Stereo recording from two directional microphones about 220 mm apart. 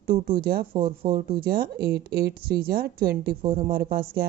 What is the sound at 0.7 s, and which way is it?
Speech, 20° right (ahead or behind).